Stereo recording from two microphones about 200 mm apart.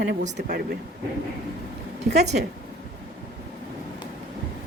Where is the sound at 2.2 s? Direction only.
35° right (ahead or behind).